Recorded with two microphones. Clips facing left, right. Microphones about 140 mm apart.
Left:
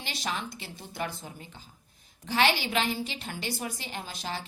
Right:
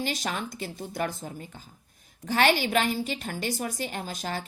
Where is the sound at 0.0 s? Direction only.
45° right (ahead or behind).